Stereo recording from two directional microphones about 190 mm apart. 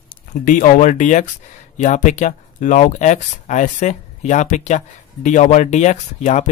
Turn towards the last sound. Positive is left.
turn(degrees=40)  # may be behind; listen again after turning